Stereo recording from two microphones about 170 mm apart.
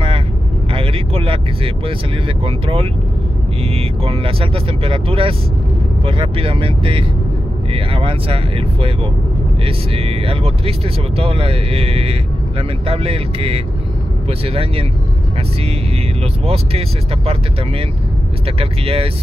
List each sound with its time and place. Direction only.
0.7 s speech: 35° right (ahead or behind)
16.4 s speech: 35° right (ahead or behind)
18.6 s speech: 35° right (ahead or behind)